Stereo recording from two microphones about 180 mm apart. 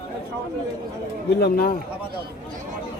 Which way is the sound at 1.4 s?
55° left (ahead or behind).